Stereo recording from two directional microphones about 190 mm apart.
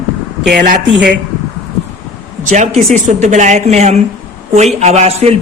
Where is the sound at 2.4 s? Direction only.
40° right (ahead or behind).